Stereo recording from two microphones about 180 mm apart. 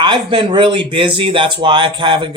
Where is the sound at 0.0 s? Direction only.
25° right (ahead or behind).